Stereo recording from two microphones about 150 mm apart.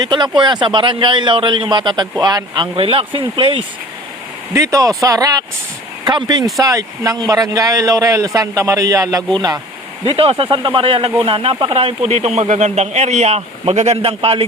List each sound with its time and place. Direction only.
0.0 s a man's voice: 30° right (ahead or behind)
4.5 s speech: 20° right (ahead or behind)
10.1 s a man's voice: 40° right (ahead or behind)